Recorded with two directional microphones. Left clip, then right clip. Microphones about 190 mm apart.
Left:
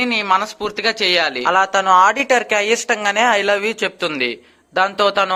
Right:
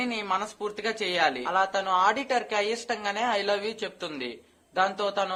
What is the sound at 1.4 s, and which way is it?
A man's voice, 40° left (ahead or behind).